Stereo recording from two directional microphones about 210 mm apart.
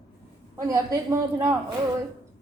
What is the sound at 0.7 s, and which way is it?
Speech, 15° right (ahead or behind).